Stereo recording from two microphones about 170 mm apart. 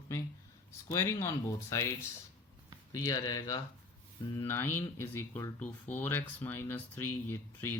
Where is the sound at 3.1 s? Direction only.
20° left (ahead or behind).